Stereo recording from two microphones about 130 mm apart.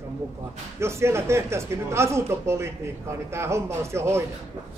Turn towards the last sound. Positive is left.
turn(degrees=-20)  # may be behind; listen again after turning